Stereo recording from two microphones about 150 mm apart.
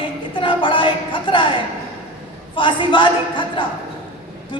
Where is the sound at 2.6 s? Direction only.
35° left (ahead or behind).